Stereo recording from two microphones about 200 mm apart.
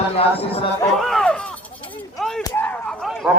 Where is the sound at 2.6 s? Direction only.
5° left (ahead or behind).